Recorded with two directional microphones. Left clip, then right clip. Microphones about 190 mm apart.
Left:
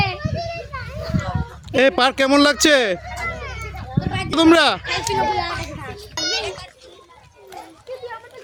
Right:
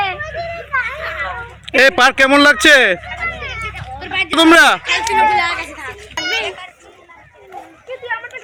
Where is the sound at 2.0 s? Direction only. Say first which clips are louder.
Right 6 dB; 10° left (ahead or behind).